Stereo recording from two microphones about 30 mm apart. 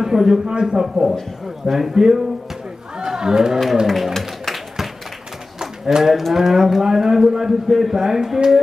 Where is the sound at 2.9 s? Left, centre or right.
Right.